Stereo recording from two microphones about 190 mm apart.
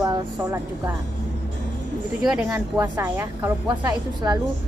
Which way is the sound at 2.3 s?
10° right (ahead or behind).